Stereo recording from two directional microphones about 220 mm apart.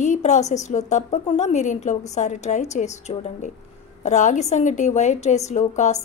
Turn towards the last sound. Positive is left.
turn(degrees=35)  # may be behind; listen again after turning